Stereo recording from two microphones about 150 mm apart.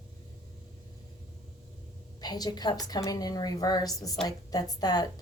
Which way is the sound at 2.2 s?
25° left (ahead or behind).